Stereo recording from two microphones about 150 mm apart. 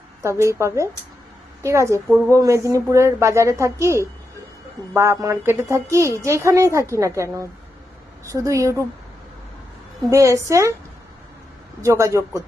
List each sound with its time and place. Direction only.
0.2 s a woman's voice: 20° right (ahead or behind)
2.0 s speech: 5° right (ahead or behind)
2.3 s a woman's voice: 20° right (ahead or behind)
8.3 s a woman's voice: 20° right (ahead or behind)
10.1 s a woman's voice: 20° right (ahead or behind)
11.8 s a woman's voice: 20° right (ahead or behind)